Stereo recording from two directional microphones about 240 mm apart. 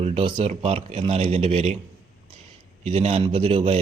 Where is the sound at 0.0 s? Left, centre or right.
Right.